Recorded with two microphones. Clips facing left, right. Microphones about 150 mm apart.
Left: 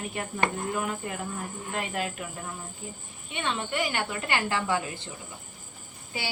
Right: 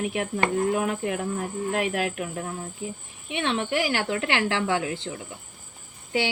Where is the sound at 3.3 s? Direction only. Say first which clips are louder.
Right 5 dB; 75° right (ahead or behind); by 5.1 s 90° right.